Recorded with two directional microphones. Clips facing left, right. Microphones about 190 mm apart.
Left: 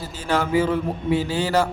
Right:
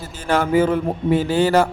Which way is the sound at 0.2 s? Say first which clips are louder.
Right 4 dB; 50° right (ahead or behind).